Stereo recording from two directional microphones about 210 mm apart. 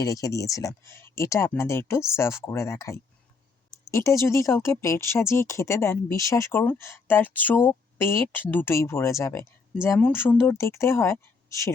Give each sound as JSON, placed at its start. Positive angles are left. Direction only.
{"t": 0.0, "sound": "speech", "side_deg": 15}